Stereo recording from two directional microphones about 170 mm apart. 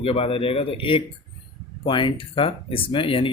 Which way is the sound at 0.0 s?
35° left (ahead or behind).